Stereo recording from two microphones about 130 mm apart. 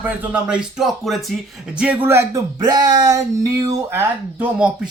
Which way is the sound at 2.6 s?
30° right (ahead or behind).